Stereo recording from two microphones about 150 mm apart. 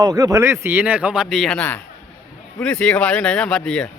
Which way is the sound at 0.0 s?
25° right (ahead or behind).